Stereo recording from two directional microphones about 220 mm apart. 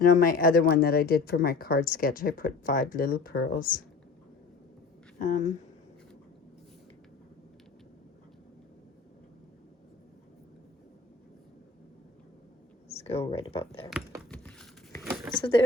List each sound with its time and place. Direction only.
0.0 s speech: 40° left (ahead or behind)
5.2 s speech: 35° left (ahead or behind)
12.9 s speech: 30° left (ahead or behind)
14.3 s a sound: 5° left (ahead or behind)
15.4 s speech: 25° left (ahead or behind)